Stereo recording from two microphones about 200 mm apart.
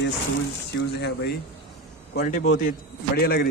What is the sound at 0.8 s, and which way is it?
Speech, 55° left (ahead or behind).